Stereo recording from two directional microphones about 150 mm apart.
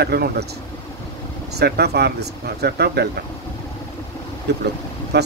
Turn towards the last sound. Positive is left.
turn(degrees=-90)